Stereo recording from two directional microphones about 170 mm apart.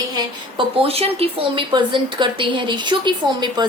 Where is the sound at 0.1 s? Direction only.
25° right (ahead or behind).